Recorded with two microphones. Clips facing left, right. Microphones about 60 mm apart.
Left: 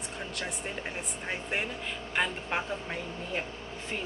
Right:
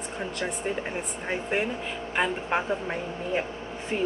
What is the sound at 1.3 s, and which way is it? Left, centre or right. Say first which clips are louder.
A woman's voice: right 6 dB; centre.